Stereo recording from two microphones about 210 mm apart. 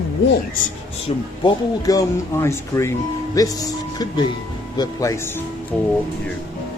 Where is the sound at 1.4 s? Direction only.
15° left (ahead or behind).